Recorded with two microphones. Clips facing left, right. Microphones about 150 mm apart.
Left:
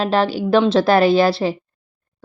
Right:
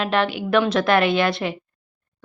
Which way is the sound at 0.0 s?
35° left (ahead or behind).